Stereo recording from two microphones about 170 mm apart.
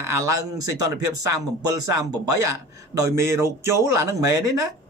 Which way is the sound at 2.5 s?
20° right (ahead or behind).